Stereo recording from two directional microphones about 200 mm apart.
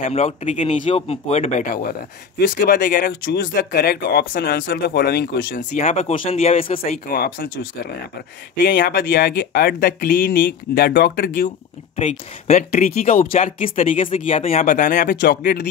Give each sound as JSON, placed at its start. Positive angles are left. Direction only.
{"t": 0.0, "sound": "speech", "side_deg": 35}
{"t": 5.8, "sound": "speech", "side_deg": 35}
{"t": 7.1, "sound": "speech", "side_deg": 45}
{"t": 8.6, "sound": "speech", "side_deg": 50}
{"t": 12.0, "sound": "speech", "side_deg": 35}
{"t": 13.9, "sound": "speech", "side_deg": 30}